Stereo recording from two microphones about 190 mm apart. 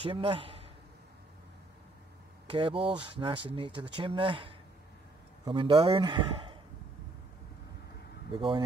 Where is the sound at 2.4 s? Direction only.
25° right (ahead or behind).